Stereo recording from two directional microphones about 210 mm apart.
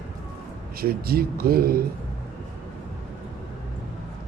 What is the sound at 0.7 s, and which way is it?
A man's voice, 45° right (ahead or behind).